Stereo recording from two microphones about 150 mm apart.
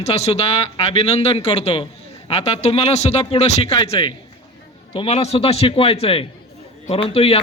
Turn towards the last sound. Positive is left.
turn(degrees=40)  # may be behind; listen again after turning